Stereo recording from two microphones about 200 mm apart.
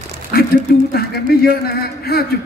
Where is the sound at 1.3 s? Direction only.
50° left (ahead or behind).